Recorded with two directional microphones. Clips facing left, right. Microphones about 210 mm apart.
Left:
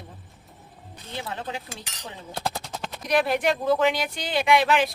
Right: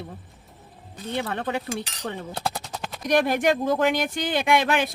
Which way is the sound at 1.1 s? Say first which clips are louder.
Right 5 dB; 60° right (ahead or behind).